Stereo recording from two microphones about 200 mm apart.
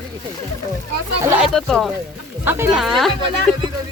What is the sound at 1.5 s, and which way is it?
Speech, centre (ahead or behind).